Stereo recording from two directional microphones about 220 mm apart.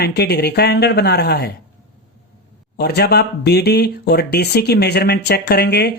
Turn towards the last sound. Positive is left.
turn(degrees=50)  # may be behind; listen again after turning